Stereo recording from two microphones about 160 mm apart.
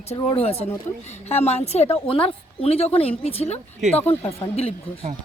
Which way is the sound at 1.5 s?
40° left (ahead or behind).